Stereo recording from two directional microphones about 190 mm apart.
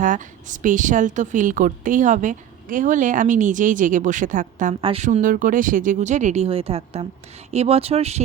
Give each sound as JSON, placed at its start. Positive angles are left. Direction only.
{"t": 0.0, "sound": "a woman's voice", "side_deg": -40}
{"t": 4.8, "sound": "speech", "side_deg": -30}
{"t": 5.0, "sound": "speech", "side_deg": -45}